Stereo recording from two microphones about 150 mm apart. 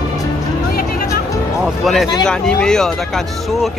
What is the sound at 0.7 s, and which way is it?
Music, 75° left (ahead or behind).